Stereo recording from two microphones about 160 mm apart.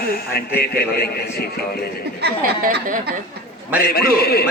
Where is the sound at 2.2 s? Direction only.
75° right (ahead or behind).